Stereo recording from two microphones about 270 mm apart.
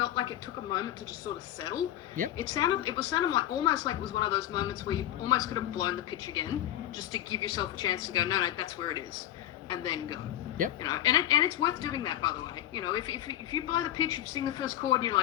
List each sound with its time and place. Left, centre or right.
0.0 s speech: centre
2.4 s a woman's voice: centre